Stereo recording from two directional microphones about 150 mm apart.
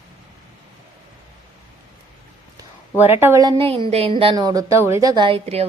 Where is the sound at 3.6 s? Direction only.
40° right (ahead or behind).